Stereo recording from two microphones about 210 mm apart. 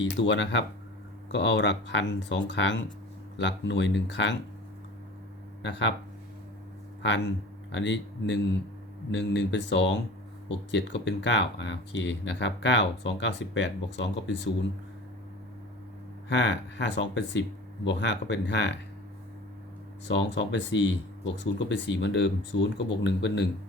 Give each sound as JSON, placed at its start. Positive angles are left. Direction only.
{"t": 0.0, "sound": "speech", "side_deg": 60}
{"t": 7.7, "sound": "speech", "side_deg": 60}
{"t": 16.3, "sound": "speech", "side_deg": 55}
{"t": 20.1, "sound": "speech", "side_deg": 55}